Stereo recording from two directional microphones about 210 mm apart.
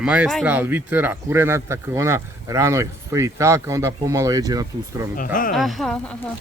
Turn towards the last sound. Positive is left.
turn(degrees=5)  # may be behind; listen again after turning